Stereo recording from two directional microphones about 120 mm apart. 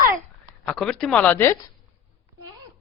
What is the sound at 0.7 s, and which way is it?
Speech, centre (ahead or behind).